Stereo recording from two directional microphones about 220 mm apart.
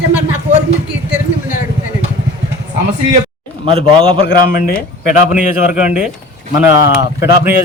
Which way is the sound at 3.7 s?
25° right (ahead or behind).